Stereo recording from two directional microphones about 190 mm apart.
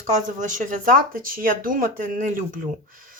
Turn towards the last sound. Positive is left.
turn(degrees=-45)  # may be behind; listen again after turning